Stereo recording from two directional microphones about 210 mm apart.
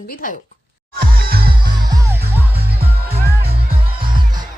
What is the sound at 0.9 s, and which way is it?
Music, 45° right (ahead or behind).